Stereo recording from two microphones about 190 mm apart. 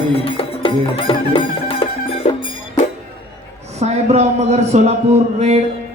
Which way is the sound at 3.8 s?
35° right (ahead or behind).